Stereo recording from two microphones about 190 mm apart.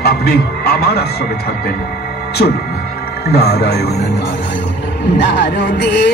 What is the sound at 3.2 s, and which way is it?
Speech, 55° left (ahead or behind).